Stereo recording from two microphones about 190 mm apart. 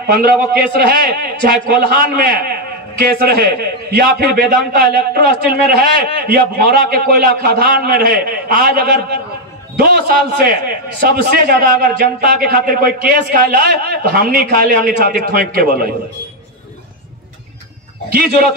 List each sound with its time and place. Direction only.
0.0 s a man's voice: 55° right (ahead or behind)
18.1 s a man's voice: 50° right (ahead or behind)